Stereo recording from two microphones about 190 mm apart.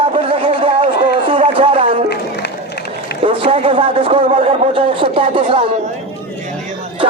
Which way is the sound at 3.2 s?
30° right (ahead or behind).